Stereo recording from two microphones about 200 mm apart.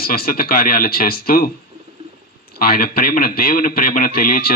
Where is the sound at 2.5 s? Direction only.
50° left (ahead or behind).